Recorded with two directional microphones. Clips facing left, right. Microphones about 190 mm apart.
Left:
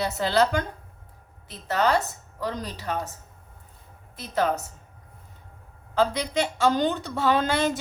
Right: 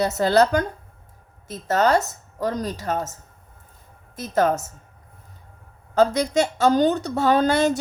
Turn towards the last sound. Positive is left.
turn(degrees=-40)  # may be behind; listen again after turning